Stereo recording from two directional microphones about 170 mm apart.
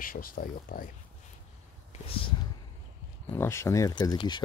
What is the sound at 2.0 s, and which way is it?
Speech, 30° left (ahead or behind).